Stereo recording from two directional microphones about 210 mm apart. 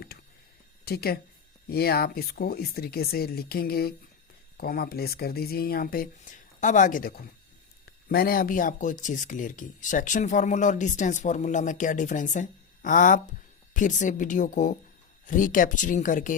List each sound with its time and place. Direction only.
0.9 s speech: 50° left (ahead or behind)